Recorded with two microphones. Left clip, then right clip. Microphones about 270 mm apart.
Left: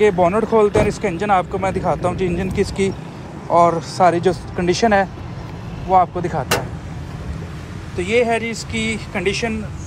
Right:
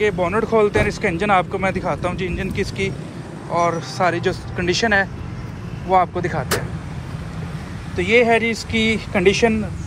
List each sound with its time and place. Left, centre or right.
0.0 s speech: centre
8.0 s speech: centre